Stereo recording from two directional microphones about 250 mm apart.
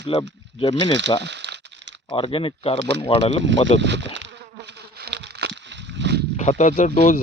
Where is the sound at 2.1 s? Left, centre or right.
Left.